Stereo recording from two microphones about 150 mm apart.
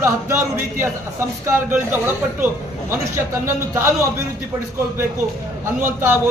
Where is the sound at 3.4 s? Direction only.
15° right (ahead or behind).